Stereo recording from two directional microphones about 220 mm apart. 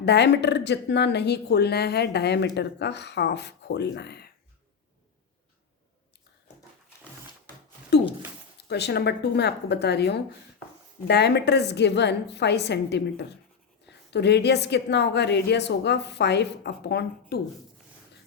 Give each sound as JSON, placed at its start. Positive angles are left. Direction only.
{"t": 0.0, "sound": "a woman's voice", "side_deg": 50}
{"t": 8.5, "sound": "a woman's voice", "side_deg": 50}